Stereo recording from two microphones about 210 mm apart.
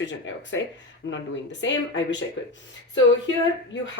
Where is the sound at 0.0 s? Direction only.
60° left (ahead or behind).